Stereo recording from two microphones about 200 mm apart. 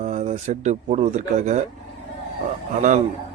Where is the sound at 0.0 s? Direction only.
35° right (ahead or behind).